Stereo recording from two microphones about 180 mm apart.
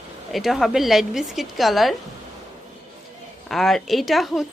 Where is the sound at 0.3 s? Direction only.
Centre (ahead or behind).